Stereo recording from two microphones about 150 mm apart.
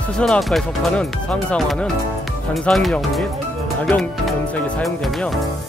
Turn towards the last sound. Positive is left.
turn(degrees=5)  # may be behind; listen again after turning